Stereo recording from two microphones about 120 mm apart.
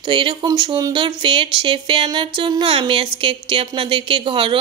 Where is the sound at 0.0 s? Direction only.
45° right (ahead or behind).